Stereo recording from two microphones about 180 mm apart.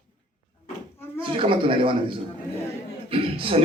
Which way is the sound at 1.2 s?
30° right (ahead or behind).